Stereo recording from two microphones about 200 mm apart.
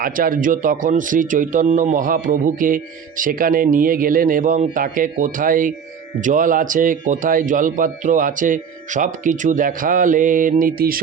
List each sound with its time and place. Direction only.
0.0 s a man's voice: 45° right (ahead or behind)